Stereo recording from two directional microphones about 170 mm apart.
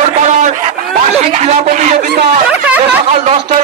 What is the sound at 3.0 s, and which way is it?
Speech, 35° right (ahead or behind).